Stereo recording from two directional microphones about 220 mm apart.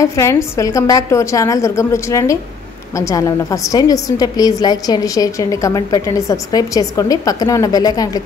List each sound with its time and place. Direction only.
0.0 s a woman's voice: 15° left (ahead or behind)